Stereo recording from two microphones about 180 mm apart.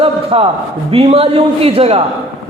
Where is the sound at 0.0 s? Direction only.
30° right (ahead or behind).